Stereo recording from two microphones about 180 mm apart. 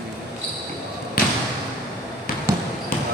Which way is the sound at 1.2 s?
55° left (ahead or behind).